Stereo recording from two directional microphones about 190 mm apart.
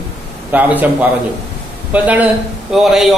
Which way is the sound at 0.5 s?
10° right (ahead or behind).